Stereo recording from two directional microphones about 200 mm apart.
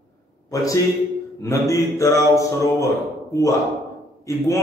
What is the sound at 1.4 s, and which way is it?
Speech, 15° left (ahead or behind).